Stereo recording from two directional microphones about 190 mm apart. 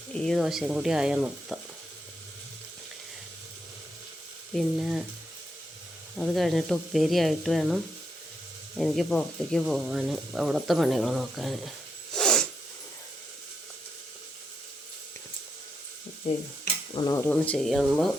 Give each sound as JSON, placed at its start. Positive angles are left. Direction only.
{"t": 0.1, "sound": "speech", "side_deg": 5}
{"t": 4.5, "sound": "speech", "side_deg": 0}
{"t": 6.1, "sound": "speech", "side_deg": 0}
{"t": 12.1, "sound": "sneeze", "side_deg": 5}
{"t": 16.9, "sound": "cutlery", "side_deg": 20}
{"t": 17.2, "sound": "speech", "side_deg": 5}